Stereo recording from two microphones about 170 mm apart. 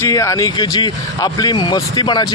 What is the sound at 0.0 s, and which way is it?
A man's voice, 20° left (ahead or behind).